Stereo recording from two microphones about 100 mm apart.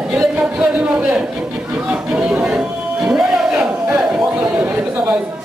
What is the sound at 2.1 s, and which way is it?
Music, 10° right (ahead or behind).